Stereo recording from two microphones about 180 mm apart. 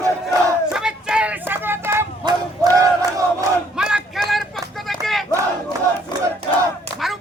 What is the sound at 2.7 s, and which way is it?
Battle cry, 20° right (ahead or behind).